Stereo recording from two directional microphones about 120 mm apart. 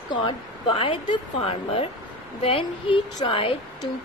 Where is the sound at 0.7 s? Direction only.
50° left (ahead or behind).